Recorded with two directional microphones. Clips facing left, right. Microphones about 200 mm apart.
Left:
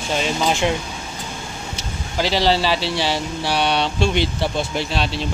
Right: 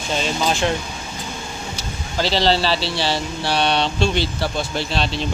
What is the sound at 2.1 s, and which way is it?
Speech, 15° left (ahead or behind).